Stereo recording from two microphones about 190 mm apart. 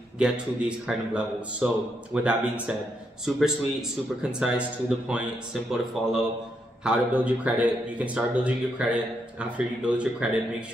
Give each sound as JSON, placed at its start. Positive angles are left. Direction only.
{"t": 0.2, "sound": "a man's voice", "side_deg": -5}